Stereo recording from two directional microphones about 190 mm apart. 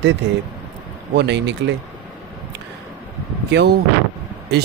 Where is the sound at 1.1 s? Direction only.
65° right (ahead or behind).